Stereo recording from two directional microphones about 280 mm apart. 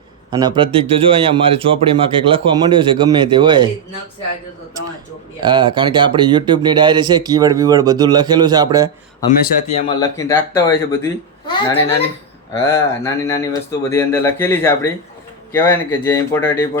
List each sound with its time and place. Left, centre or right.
0.3 s speech: centre
5.4 s speech: centre
9.7 s speech: centre